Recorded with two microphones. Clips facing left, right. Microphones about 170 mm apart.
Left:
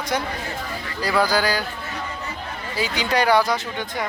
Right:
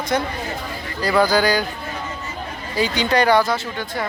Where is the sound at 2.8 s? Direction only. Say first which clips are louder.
Right 4 dB; 5° left (ahead or behind).